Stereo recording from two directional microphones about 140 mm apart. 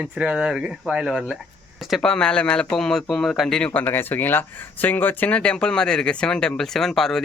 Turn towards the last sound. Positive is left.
turn(degrees=0)  # may be behind; listen again after turning